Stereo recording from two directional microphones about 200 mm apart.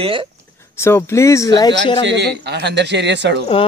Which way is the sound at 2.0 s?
60° right (ahead or behind).